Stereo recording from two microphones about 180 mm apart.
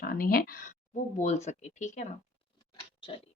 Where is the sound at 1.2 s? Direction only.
40° left (ahead or behind).